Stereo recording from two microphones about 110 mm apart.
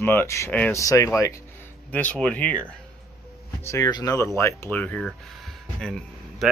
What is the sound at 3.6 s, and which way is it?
Speech, 25° left (ahead or behind).